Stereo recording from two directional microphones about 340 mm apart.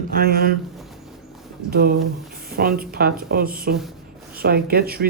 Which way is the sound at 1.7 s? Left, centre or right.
Right.